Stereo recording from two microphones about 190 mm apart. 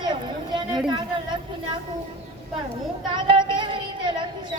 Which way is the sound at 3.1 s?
25° right (ahead or behind).